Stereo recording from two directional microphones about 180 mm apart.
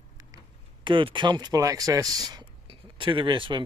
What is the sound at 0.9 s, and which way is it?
Speech, 25° right (ahead or behind).